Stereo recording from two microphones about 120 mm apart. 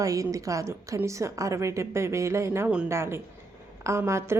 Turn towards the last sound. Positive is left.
turn(degrees=-25)  # may be behind; listen again after turning